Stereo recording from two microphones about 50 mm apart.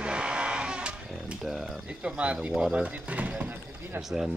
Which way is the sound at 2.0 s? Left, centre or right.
Right.